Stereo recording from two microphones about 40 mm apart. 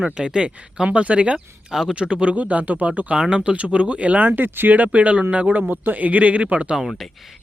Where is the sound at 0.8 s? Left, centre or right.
Right.